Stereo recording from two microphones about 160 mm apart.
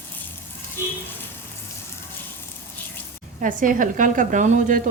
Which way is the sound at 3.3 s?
55° right (ahead or behind).